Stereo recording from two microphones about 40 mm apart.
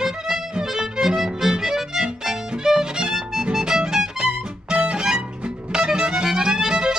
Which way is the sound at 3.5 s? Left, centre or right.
Centre.